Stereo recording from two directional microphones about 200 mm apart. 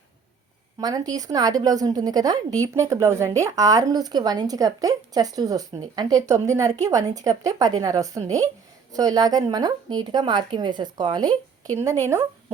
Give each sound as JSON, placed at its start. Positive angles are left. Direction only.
{"t": 0.8, "sound": "a woman's voice", "side_deg": -20}